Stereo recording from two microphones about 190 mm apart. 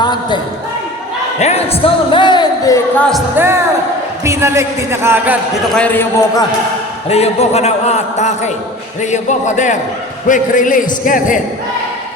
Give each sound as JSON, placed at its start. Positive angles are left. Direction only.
{"t": 0.0, "sound": "speech", "side_deg": 25}
{"t": 1.4, "sound": "a man's voice", "side_deg": 35}
{"t": 3.3, "sound": "a man's voice", "side_deg": -10}
{"t": 5.7, "sound": "a man's voice", "side_deg": 10}
{"t": 7.1, "sound": "a man's voice", "side_deg": 35}